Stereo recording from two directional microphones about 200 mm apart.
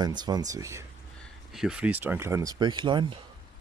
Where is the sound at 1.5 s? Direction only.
5° right (ahead or behind); by 3.2 s 25° right (ahead or behind).